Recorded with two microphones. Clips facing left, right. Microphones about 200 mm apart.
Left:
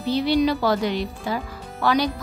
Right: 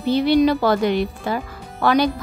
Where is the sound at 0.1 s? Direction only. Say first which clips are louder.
Right 4 dB; 55° right (ahead or behind).